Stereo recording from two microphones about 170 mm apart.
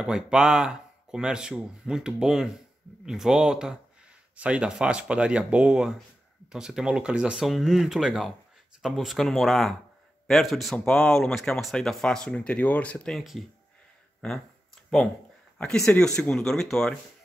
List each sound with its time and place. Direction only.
0.0 s speech: 5° right (ahead or behind)
14.8 s a sound: 5° left (ahead or behind)
15.5 s speech: 5° left (ahead or behind)